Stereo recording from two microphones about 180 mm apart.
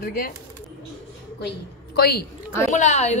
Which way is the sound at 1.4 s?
60° left (ahead or behind).